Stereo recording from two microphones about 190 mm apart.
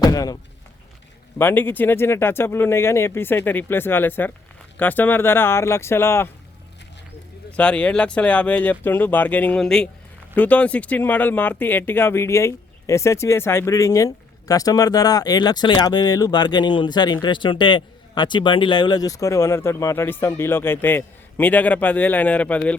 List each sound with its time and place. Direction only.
0.0 s a sound: 20° left (ahead or behind)
1.4 s speech: 10° left (ahead or behind)
7.5 s speech: 5° left (ahead or behind)